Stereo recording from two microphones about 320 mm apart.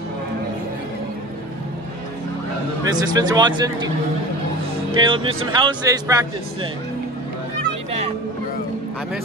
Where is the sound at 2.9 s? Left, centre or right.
Centre.